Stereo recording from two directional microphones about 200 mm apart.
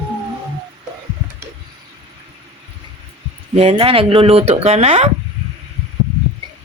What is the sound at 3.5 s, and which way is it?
Speech, 30° right (ahead or behind).